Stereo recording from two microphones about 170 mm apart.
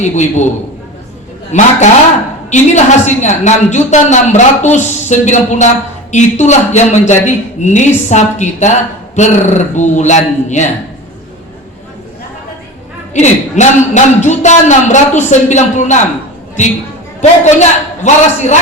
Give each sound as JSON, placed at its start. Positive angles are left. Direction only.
{"t": 0.0, "sound": "a woman's voice", "side_deg": 45}
{"t": 1.5, "sound": "a woman's voice", "side_deg": 45}
{"t": 13.1, "sound": "a woman's voice", "side_deg": 45}
{"t": 17.2, "sound": "a woman's voice", "side_deg": 45}